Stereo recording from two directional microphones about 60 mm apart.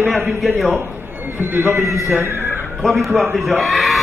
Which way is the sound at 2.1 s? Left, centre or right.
Right.